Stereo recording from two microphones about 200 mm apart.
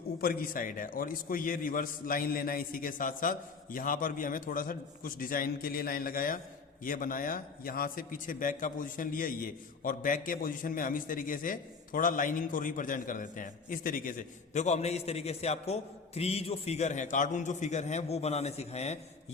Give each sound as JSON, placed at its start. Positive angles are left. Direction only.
{"t": 0.2, "sound": "a man's voice", "side_deg": 45}